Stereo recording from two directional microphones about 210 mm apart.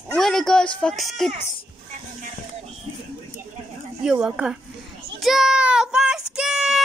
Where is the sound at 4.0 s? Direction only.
5° right (ahead or behind).